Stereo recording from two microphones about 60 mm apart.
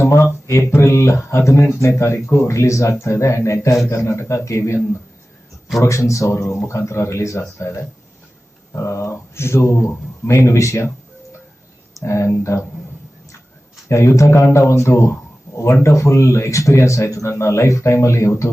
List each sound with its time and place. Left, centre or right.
0.0 s speech: left
5.8 s speech: left
12.0 s speech: left
13.8 s speech: left